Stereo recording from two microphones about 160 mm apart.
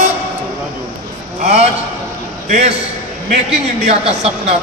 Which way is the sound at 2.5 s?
45° right (ahead or behind).